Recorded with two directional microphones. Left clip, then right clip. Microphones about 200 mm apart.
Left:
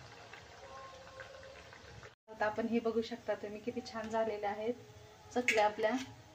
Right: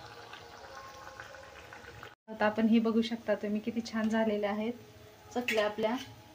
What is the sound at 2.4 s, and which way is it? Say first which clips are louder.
Speech: right 5 dB; 35° right (ahead or behind).